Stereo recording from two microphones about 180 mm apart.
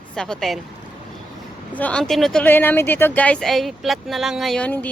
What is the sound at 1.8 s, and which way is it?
Speech, 5° left (ahead or behind).